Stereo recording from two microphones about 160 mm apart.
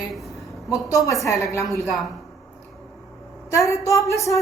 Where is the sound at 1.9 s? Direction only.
Centre (ahead or behind).